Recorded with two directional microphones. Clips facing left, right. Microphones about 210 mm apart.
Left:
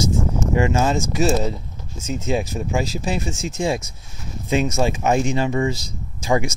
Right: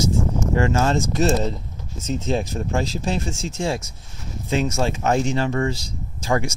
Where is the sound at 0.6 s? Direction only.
10° left (ahead or behind).